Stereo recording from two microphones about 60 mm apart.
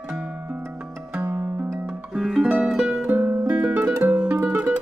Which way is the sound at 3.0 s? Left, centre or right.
Right.